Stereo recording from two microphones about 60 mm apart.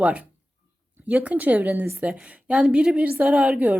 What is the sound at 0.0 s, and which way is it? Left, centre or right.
A woman's voice, right.